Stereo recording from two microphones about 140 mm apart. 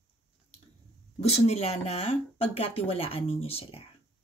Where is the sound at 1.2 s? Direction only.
50° left (ahead or behind).